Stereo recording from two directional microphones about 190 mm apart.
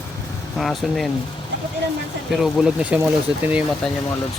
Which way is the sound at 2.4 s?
Centre (ahead or behind).